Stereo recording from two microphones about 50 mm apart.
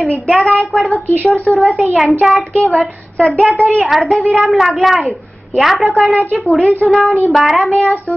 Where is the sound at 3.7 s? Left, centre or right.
Centre.